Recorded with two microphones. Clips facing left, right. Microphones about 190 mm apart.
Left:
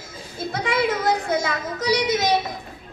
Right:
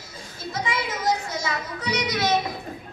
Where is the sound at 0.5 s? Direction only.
60° left (ahead or behind).